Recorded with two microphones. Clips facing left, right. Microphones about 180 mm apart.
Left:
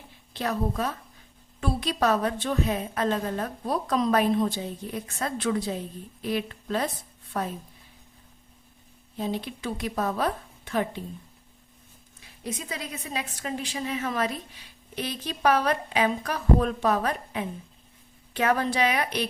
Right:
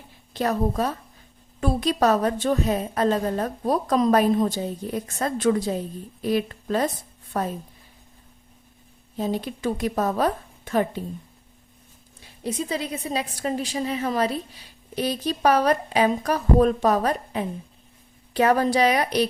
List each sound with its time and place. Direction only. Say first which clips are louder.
0.3 s a woman's voice: right 5 dB; 40° right (ahead or behind)
9.1 s a woman's voice: right 4 dB; 40° right (ahead or behind)
12.4 s a woman's voice: right 7 dB; 30° right (ahead or behind)